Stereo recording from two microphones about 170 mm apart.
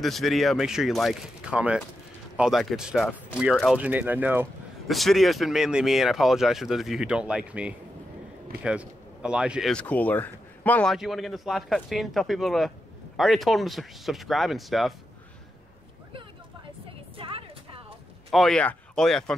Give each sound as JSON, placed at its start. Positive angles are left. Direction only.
{"t": 0.0, "sound": "speech", "side_deg": 0}
{"t": 4.8, "sound": "speech", "side_deg": 0}
{"t": 17.2, "sound": "music", "side_deg": -35}
{"t": 18.3, "sound": "speech", "side_deg": 0}